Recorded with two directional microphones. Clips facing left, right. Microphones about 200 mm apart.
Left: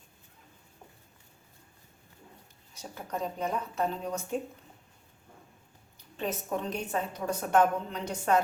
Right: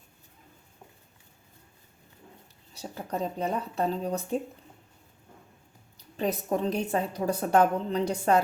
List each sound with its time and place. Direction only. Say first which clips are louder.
2.7 s a woman's voice: right 4 dB; 35° right (ahead or behind)
6.1 s a woman's voice: right 5 dB; 35° right (ahead or behind)